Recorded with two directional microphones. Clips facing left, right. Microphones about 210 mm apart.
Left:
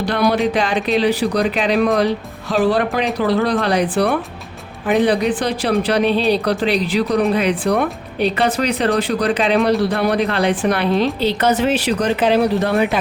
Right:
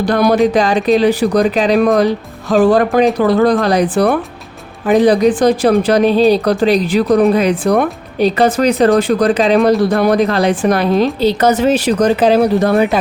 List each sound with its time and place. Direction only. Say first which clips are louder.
0.0 s speech: right 5 dB; 45° right (ahead or behind)